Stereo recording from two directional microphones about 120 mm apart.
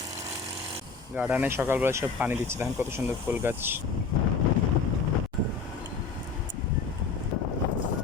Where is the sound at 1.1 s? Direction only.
10° right (ahead or behind).